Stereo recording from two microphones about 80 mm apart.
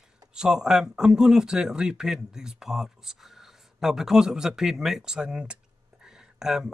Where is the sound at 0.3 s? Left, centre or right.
Centre.